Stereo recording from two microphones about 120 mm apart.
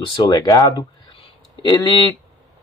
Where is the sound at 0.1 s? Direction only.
40° left (ahead or behind).